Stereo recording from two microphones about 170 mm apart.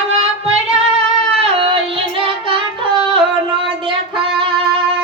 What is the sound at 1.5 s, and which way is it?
Music, 35° right (ahead or behind).